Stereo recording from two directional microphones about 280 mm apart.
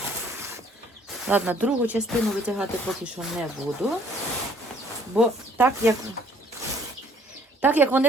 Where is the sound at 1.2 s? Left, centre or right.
Centre.